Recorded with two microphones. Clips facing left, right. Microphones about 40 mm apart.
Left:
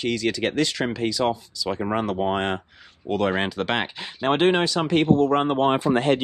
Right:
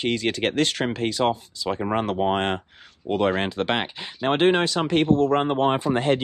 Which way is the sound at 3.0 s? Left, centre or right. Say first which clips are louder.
Right 1 dB; centre.